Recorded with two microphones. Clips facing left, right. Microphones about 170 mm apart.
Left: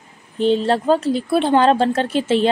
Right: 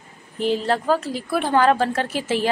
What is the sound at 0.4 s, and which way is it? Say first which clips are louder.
Speech: left 5 dB; 30° left (ahead or behind).